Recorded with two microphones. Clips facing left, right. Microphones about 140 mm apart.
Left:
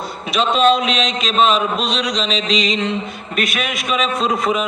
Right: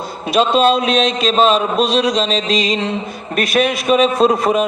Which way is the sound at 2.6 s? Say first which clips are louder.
Right 1 dB; 35° right (ahead or behind).